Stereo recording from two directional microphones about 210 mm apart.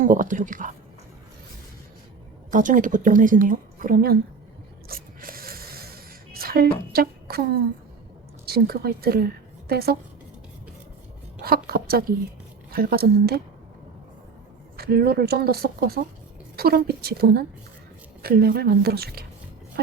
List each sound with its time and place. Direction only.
0.0 s a woman's voice: 40° right (ahead or behind)
2.5 s a woman's voice: 40° right (ahead or behind)
4.9 s a sound: 45° right (ahead or behind)
8.4 s a woman's voice: 45° right (ahead or behind)
11.4 s speech: 45° right (ahead or behind)
14.8 s speech: 50° right (ahead or behind)